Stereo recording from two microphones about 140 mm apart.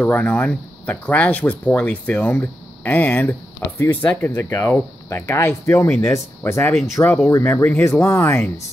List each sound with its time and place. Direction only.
0.0 s speech: 10° left (ahead or behind)